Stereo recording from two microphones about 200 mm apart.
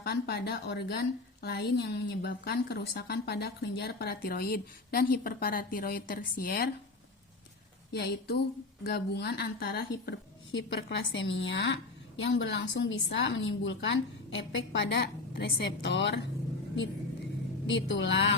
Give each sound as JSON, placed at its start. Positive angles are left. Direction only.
{"t": 0.0, "sound": "a woman's voice", "side_deg": 55}
{"t": 7.9, "sound": "a woman's voice", "side_deg": 55}
{"t": 17.7, "sound": "speech", "side_deg": 65}